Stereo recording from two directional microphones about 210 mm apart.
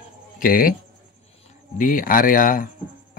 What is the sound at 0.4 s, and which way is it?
Speech, 45° left (ahead or behind).